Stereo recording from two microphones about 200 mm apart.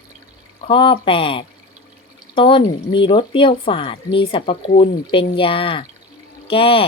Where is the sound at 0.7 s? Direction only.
25° left (ahead or behind).